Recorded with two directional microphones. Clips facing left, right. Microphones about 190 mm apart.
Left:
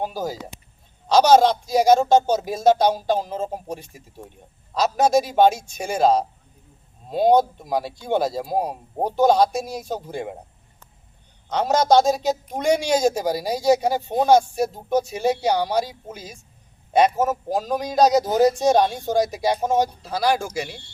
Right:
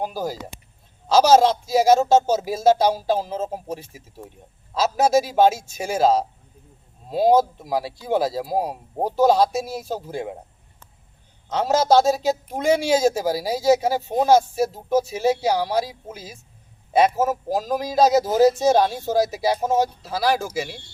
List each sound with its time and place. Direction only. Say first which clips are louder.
0.0 s speech: even; centre (ahead or behind)
11.4 s speech: even; 5° right (ahead or behind)